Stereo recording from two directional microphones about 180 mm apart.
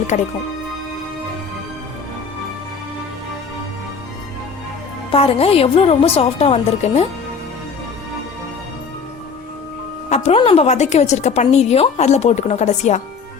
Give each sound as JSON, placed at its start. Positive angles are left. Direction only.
{"t": 0.1, "sound": "a woman's voice", "side_deg": 40}
{"t": 5.1, "sound": "a woman's voice", "side_deg": 35}
{"t": 10.1, "sound": "a woman's voice", "side_deg": 35}